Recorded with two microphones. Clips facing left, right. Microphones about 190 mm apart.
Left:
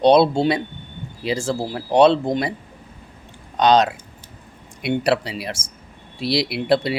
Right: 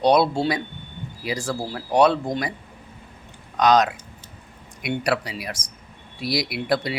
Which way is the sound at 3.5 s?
30° left (ahead or behind).